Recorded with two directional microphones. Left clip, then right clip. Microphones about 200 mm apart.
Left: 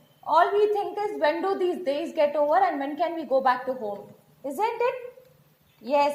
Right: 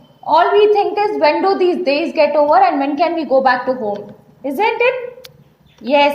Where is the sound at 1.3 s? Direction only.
25° left (ahead or behind).